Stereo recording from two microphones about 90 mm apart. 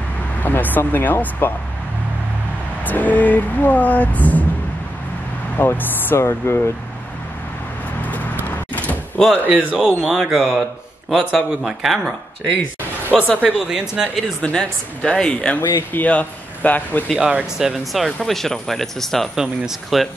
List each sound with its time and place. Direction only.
0.4 s speech: 20° left (ahead or behind)
2.8 s speech: 20° left (ahead or behind)
5.6 s speech: 20° left (ahead or behind)
8.5 s door: 20° left (ahead or behind)
9.5 s speech: 10° right (ahead or behind)
13.4 s speech: 10° right (ahead or behind)
14.4 s speech: 10° left (ahead or behind)
17.1 s speech: 10° right (ahead or behind)